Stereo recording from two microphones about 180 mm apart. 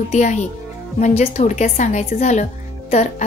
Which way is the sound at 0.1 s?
40° left (ahead or behind).